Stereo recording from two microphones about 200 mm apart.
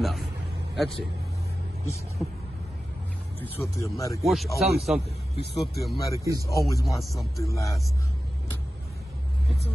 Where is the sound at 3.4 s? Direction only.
15° left (ahead or behind).